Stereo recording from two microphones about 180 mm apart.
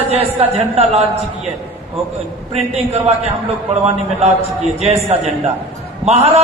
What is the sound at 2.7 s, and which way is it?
Speech, 35° right (ahead or behind).